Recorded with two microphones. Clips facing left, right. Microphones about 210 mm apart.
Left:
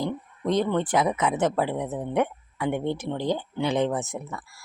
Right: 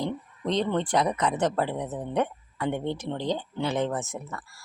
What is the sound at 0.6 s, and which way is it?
Speech, 5° left (ahead or behind).